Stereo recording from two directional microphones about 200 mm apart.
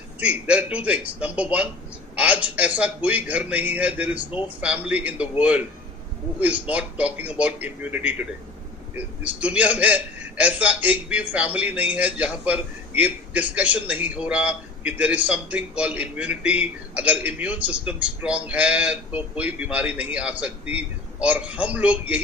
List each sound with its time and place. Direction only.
0.2 s a man's voice: 5° right (ahead or behind)